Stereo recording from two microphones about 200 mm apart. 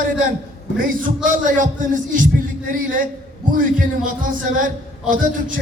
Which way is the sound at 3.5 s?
45° right (ahead or behind).